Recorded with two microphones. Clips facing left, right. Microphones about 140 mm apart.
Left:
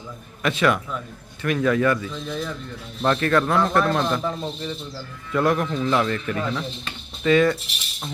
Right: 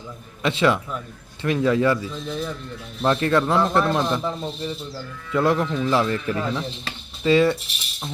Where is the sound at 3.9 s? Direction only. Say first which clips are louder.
Even; 10° right (ahead or behind).